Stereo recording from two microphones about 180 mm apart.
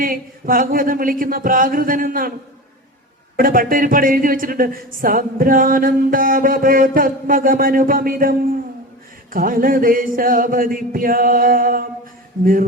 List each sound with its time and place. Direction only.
0.0 s speech: 50° right (ahead or behind)
3.3 s speech: 50° right (ahead or behind)